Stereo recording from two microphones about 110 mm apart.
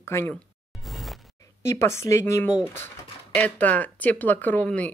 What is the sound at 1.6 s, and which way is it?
Speech, 25° left (ahead or behind).